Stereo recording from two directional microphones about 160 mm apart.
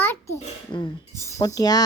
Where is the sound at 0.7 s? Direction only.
30° left (ahead or behind).